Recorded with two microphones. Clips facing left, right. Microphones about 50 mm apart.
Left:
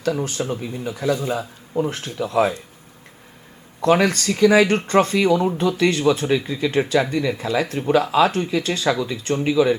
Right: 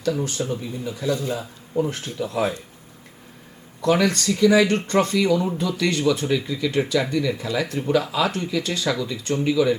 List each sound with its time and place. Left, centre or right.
0.0 s speech: left
1.1 s a man's voice: left
3.8 s speech: left